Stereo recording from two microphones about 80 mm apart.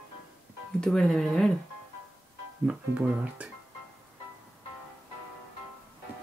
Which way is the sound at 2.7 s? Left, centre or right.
Centre.